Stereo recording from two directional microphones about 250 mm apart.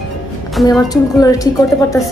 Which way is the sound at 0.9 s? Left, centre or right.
Centre.